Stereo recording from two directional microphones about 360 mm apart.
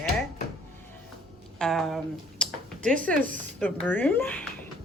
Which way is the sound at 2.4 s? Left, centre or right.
Centre.